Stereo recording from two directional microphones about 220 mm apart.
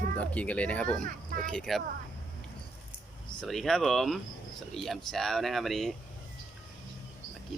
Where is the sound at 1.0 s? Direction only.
40° right (ahead or behind).